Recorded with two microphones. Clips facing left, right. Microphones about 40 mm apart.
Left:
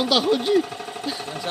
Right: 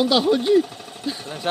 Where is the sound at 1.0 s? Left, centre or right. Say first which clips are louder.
Right 2 dB; centre.